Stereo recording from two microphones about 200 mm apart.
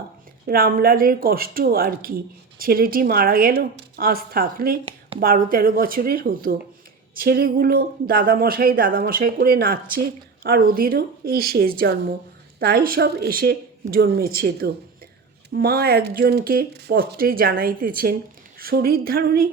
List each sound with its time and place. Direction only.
0.4 s speech: 45° right (ahead or behind)
4.9 s a sound: 30° right (ahead or behind)
5.2 s speech: 45° right (ahead or behind)